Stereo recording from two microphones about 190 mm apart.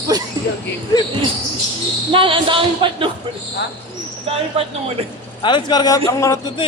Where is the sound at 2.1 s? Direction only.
25° right (ahead or behind).